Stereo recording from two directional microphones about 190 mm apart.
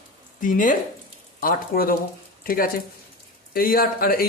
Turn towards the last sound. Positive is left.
turn(degrees=50)  # may be behind; listen again after turning